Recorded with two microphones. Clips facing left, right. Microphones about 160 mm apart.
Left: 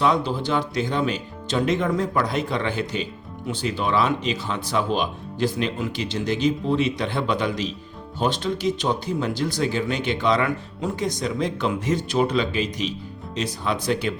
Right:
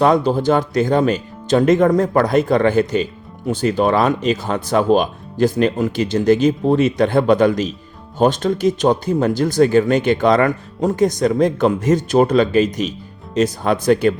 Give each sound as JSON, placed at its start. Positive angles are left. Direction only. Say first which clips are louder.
{"t": 0.0, "sound": "speech", "louder": "right 7 dB", "side_deg": -45}